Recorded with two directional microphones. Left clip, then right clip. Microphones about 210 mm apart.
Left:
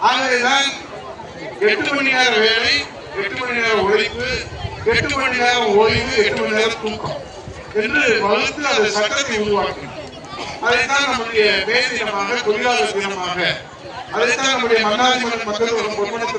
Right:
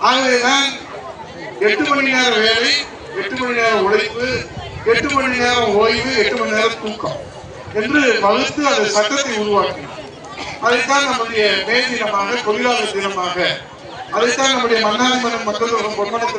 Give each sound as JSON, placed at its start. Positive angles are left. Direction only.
{"t": 0.1, "sound": "a man's voice", "side_deg": 15}
{"t": 10.9, "sound": "a man's voice", "side_deg": 15}